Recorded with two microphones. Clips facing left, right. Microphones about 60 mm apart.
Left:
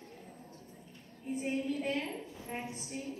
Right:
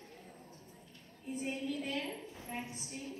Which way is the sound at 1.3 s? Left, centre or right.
Left.